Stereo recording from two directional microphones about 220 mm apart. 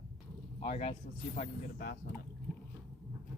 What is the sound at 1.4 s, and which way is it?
Speech, 40° left (ahead or behind).